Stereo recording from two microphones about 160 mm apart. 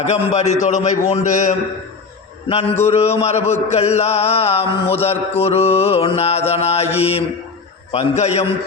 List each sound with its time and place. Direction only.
0.0 s a man's voice: 45° left (ahead or behind)
2.5 s a man's voice: 40° left (ahead or behind)